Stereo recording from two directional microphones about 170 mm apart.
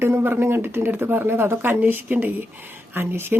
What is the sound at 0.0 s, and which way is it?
A woman's voice, 15° right (ahead or behind).